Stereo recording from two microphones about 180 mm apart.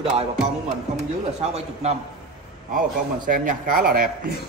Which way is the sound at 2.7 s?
45° right (ahead or behind).